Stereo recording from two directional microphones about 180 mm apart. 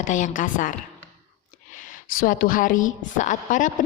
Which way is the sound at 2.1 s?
50° left (ahead or behind).